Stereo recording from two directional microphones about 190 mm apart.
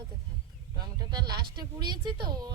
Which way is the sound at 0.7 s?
20° right (ahead or behind).